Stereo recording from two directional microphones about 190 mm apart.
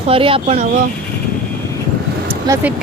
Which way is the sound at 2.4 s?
15° right (ahead or behind).